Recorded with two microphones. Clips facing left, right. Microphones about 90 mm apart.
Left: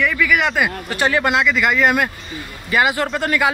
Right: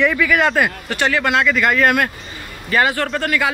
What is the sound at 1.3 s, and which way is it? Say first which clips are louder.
A man's voice: right 1 dB; 5° left (ahead or behind).